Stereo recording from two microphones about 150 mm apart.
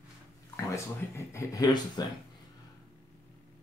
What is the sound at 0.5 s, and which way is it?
Speech, 20° left (ahead or behind).